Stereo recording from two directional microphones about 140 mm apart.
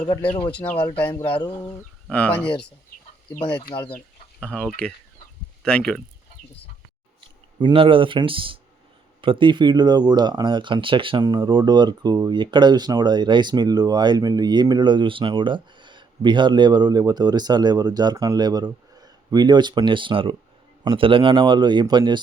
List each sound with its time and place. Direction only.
0.5 s speech: 10° left (ahead or behind)
2.0 s speech: 10° left (ahead or behind)
7.2 s speech: 35° right (ahead or behind)